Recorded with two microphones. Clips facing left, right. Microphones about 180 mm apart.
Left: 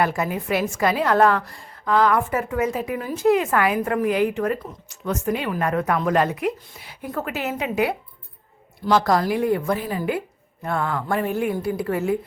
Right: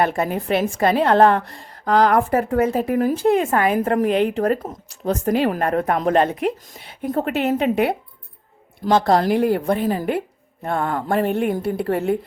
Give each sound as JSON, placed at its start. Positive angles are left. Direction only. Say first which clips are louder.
{"t": 0.0, "sound": "a woman's voice", "louder": "right 2 dB", "side_deg": -30}
{"t": 3.2, "sound": "a woman's voice", "louder": "right 1 dB", "side_deg": -30}
{"t": 7.0, "sound": "a woman's voice", "louder": "right 6 dB", "side_deg": -40}
{"t": 8.9, "sound": "a woman's voice", "louder": "right 3 dB", "side_deg": -25}
{"t": 9.8, "sound": "a woman's voice", "louder": "right 5 dB", "side_deg": -40}
{"t": 10.2, "sound": "a sound", "louder": "right 4 dB", "side_deg": -30}
{"t": 10.8, "sound": "a woman's voice", "louder": "right 5 dB", "side_deg": -35}
{"t": 11.3, "sound": "a woman's voice", "louder": "right 2 dB", "side_deg": -60}